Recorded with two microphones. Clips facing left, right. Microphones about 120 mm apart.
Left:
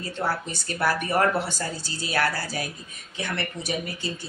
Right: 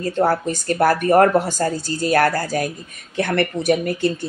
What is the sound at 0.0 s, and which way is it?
A woman's voice, 45° right (ahead or behind).